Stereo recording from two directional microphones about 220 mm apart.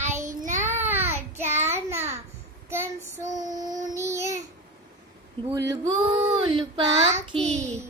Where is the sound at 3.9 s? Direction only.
15° right (ahead or behind).